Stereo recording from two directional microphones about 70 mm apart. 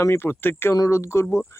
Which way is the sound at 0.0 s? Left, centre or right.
Left.